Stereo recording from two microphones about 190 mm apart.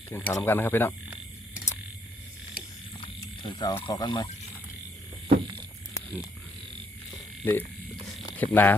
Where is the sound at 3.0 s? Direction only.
25° left (ahead or behind).